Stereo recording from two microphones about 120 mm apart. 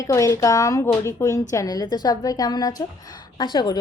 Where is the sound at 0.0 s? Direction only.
25° left (ahead or behind).